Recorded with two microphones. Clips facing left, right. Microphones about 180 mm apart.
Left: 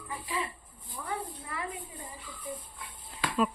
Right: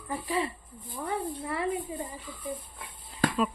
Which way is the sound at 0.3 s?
35° right (ahead or behind).